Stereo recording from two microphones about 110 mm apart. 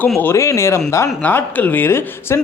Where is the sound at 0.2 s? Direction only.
25° left (ahead or behind).